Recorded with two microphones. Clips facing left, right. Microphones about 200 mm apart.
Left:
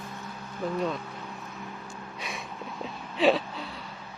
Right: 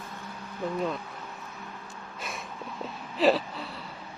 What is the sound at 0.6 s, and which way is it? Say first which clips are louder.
Speech: left 1 dB; centre (ahead or behind).